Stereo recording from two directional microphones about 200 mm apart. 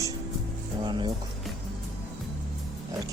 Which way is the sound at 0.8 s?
25° right (ahead or behind).